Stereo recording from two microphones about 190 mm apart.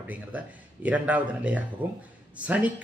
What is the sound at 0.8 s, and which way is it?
A man's voice, 10° right (ahead or behind).